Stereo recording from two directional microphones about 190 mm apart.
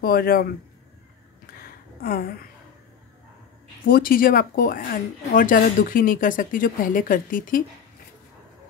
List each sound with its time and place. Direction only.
0.0 s speech: 55° left (ahead or behind)
1.5 s a sound: 50° left (ahead or behind)
3.8 s speech: 50° left (ahead or behind)